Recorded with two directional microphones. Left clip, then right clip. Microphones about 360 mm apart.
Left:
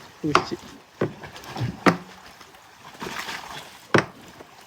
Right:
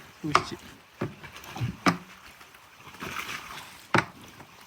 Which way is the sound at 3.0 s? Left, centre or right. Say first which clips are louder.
Left 3 dB; left.